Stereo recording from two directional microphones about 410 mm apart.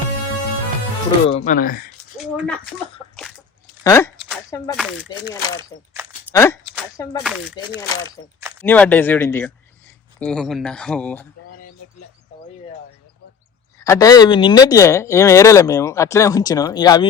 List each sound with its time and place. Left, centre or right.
1.3 s speech: centre
2.1 s speech: centre
3.8 s speech: centre
5.7 s speech: centre
8.2 s speech: centre
13.7 s speech: centre